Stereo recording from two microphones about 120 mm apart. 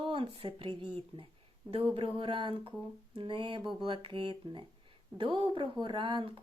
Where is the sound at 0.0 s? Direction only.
45° right (ahead or behind).